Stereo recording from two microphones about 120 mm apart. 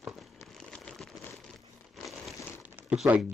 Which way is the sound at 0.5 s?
5° left (ahead or behind).